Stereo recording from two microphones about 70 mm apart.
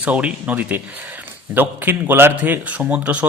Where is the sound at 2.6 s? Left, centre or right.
Right.